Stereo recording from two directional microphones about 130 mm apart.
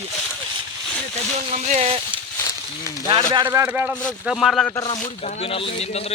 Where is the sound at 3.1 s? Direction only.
40° right (ahead or behind).